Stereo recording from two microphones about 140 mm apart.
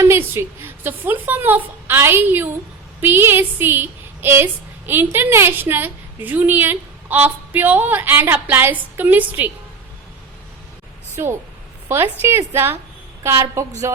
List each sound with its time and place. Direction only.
0.0 s a woman's voice: 20° right (ahead or behind)
11.1 s a woman's voice: 15° right (ahead or behind)